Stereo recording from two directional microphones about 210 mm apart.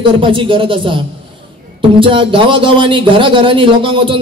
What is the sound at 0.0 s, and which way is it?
Speech, 25° right (ahead or behind).